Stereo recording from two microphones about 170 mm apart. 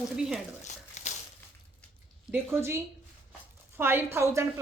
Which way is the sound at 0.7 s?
45° left (ahead or behind).